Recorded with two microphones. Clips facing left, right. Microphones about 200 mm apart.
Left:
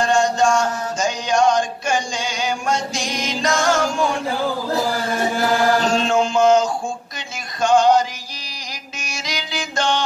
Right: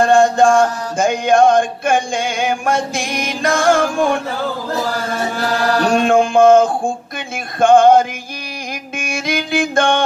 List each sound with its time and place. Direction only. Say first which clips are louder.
0.0 s mantra: right 6 dB; 55° right (ahead or behind)
5.8 s speech: right 5 dB; 55° right (ahead or behind)
9.0 s mantra: right 9 dB; 55° right (ahead or behind)